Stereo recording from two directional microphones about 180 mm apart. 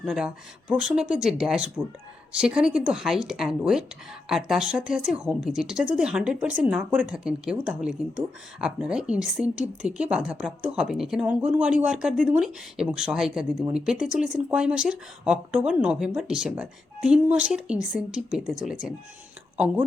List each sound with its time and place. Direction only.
0.0 s speech: 5° right (ahead or behind)